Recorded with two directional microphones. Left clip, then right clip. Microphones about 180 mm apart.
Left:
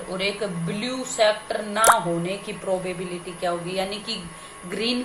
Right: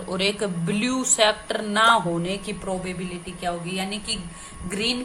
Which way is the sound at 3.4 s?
10° right (ahead or behind).